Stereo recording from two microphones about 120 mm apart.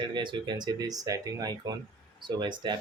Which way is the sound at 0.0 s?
40° right (ahead or behind).